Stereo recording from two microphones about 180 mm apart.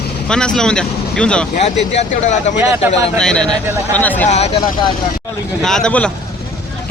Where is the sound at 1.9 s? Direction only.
40° left (ahead or behind).